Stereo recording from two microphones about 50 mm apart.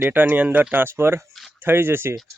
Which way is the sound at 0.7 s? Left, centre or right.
Right.